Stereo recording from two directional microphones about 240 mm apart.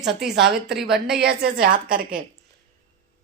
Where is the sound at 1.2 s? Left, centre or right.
Right.